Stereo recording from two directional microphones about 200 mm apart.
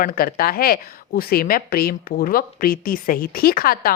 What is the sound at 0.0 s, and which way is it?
Speech, 45° left (ahead or behind).